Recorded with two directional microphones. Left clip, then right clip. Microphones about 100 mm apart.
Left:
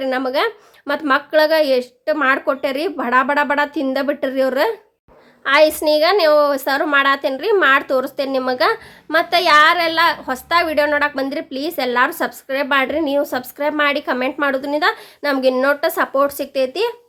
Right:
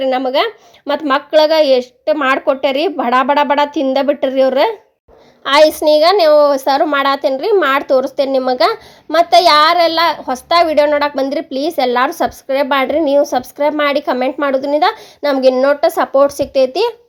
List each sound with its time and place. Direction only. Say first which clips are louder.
0.0 s a woman's voice: right 4 dB; 15° right (ahead or behind)
5.4 s a woman's voice: right 4 dB; 40° right (ahead or behind)